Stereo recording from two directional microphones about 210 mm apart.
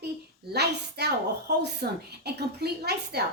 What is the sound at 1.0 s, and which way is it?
A woman's voice, 50° right (ahead or behind).